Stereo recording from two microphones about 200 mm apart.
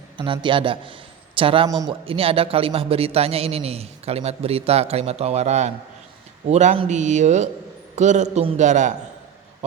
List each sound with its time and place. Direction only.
0.2 s a man's voice: 25° right (ahead or behind)